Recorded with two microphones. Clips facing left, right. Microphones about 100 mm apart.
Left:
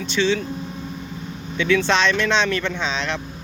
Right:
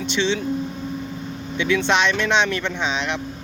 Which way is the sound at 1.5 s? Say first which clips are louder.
Left 1 dB; 20° right (ahead or behind).